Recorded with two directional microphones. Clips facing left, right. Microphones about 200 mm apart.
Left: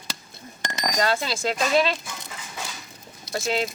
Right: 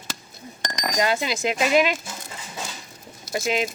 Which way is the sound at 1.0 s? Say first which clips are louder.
Right 2 dB; 15° right (ahead or behind).